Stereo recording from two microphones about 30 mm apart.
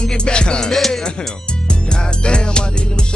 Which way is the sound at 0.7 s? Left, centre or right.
Centre.